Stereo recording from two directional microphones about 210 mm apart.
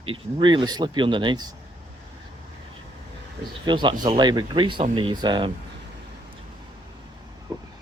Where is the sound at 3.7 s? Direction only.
20° right (ahead or behind).